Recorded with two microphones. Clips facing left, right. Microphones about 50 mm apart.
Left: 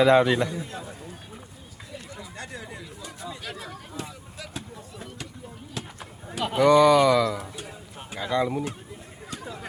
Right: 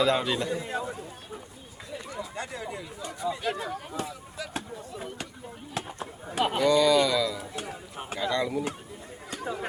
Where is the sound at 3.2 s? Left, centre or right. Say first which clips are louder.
Right 8 dB; centre.